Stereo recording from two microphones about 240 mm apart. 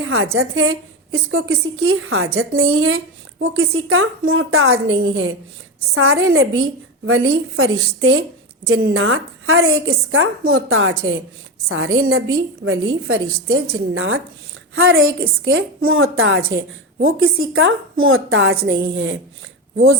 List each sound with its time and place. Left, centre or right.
0.0 s a woman's voice: right